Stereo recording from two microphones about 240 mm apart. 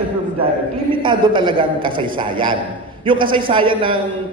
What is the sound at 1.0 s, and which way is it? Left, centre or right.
A man's voice, centre.